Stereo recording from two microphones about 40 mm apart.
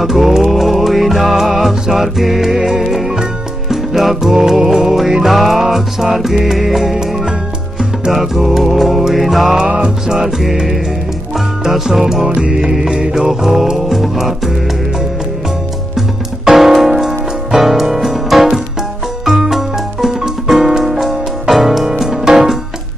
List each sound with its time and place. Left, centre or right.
0.0 s music: centre
8.1 s music: centre
9.7 s music: right
10.0 s music: centre
16.4 s music: centre
17.6 s piano: centre
19.2 s music: centre
20.4 s piano: centre
22.2 s music: centre